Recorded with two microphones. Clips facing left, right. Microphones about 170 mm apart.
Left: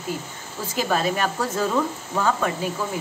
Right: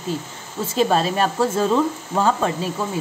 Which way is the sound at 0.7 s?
30° right (ahead or behind).